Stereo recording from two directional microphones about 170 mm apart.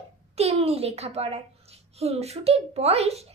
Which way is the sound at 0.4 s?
40° right (ahead or behind).